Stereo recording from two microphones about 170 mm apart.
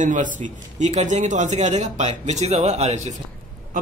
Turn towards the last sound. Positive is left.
turn(degrees=-40)  # may be behind; listen again after turning